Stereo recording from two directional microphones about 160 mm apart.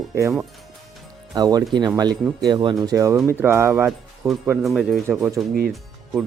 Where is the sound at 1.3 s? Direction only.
25° right (ahead or behind).